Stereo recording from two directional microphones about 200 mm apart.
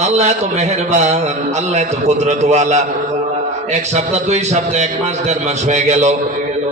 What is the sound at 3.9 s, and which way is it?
A man's voice, 35° right (ahead or behind).